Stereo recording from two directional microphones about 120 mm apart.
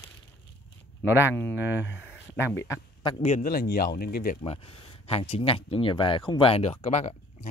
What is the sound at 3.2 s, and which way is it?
Speech, 65° left (ahead or behind).